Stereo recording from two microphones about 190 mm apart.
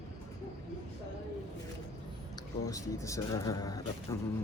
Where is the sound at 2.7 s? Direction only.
15° left (ahead or behind).